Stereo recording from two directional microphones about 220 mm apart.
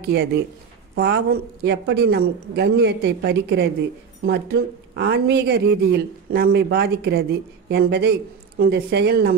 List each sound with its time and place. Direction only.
0.1 s a woman's voice: 45° right (ahead or behind)